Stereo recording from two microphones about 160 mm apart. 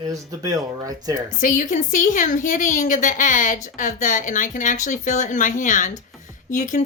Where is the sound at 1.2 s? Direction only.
55° left (ahead or behind).